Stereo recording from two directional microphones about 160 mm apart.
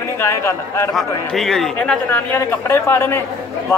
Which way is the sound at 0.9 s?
Centre (ahead or behind).